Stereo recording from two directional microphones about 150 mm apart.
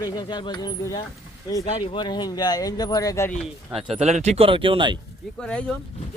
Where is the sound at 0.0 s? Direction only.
30° left (ahead or behind).